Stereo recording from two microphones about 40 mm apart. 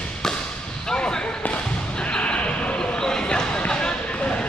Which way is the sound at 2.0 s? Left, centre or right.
Left.